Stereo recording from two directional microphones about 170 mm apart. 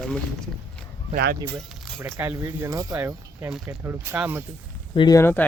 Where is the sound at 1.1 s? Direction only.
60° right (ahead or behind).